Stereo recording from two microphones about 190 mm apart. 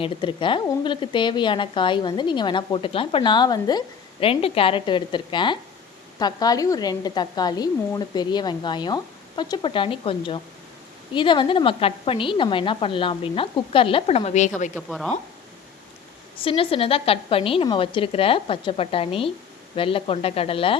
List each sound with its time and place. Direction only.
0.0 s a woman's voice: 25° left (ahead or behind)
14.8 s speech: centre (ahead or behind)
16.4 s a woman's voice: 30° left (ahead or behind)